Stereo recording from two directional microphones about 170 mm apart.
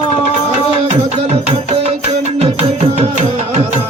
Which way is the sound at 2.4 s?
35° right (ahead or behind).